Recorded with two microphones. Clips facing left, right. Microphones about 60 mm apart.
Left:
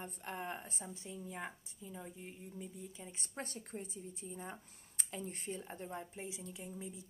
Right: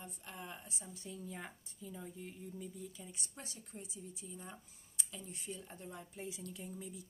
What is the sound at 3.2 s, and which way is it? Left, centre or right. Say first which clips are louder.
Speech: left 6 dB; left.